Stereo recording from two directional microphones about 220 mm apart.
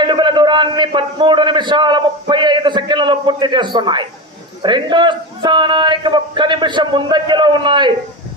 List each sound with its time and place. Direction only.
0.0 s a man's voice: 20° right (ahead or behind)